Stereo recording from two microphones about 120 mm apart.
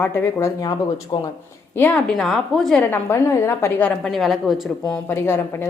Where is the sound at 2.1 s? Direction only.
Centre (ahead or behind).